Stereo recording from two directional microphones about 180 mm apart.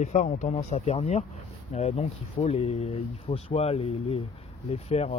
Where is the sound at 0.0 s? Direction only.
40° left (ahead or behind).